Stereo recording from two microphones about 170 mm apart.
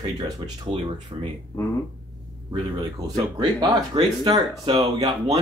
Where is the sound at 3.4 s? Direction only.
25° right (ahead or behind).